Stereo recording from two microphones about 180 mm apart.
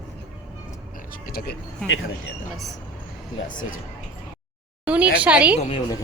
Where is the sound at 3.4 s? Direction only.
50° left (ahead or behind).